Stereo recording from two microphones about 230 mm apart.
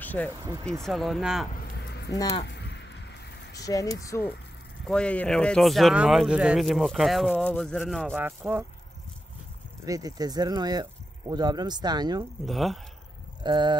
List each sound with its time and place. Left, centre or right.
0.0 s a sound: centre
0.8 s speech: centre
1.5 s a sound: left
2.1 s speech: centre
2.4 s a sound: left
3.5 s speech: centre
9.8 s speech: centre
12.4 s speech: centre
13.4 s speech: centre